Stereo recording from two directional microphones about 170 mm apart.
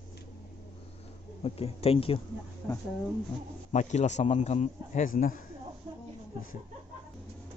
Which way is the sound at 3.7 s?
45° left (ahead or behind).